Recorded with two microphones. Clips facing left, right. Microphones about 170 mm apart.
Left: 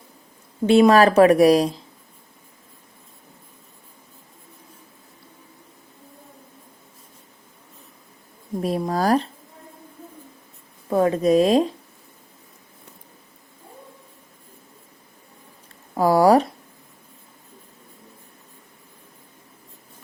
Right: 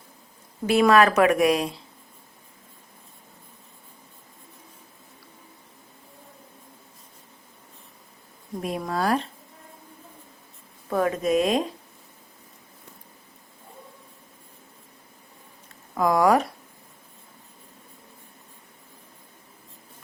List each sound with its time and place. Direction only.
0.7 s speech: 30° left (ahead or behind)
8.6 s speech: 35° left (ahead or behind)
10.8 s speech: 25° left (ahead or behind)
16.0 s speech: 35° left (ahead or behind)